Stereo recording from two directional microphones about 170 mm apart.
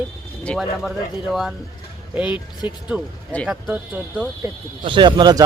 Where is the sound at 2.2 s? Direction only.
25° left (ahead or behind).